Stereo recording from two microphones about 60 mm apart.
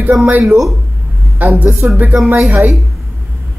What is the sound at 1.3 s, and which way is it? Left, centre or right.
A woman's voice, right.